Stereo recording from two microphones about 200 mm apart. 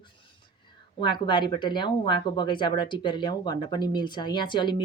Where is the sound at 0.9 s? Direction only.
25° left (ahead or behind).